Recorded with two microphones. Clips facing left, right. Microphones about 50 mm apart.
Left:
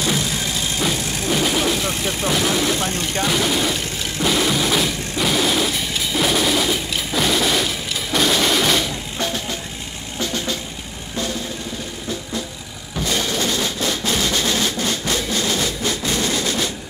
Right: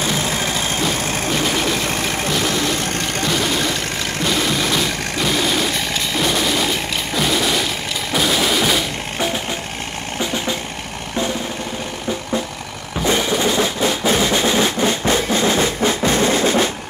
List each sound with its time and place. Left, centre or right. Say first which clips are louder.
0.2 s vehicle: right 3 dB; right
2.3 s vehicle: left 1 dB; centre
3.3 s a sound: even; centre
4.2 s vehicle: left 1 dB; centre
9.2 s vehicle: right 3 dB; right
13.0 s music: right 4 dB; right